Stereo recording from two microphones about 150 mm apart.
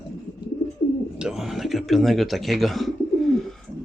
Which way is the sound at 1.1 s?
5° right (ahead or behind).